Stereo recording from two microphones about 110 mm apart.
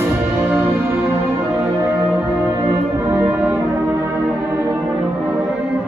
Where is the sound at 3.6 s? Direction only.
30° right (ahead or behind).